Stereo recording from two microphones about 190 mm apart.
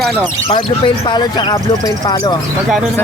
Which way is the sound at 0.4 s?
25° left (ahead or behind).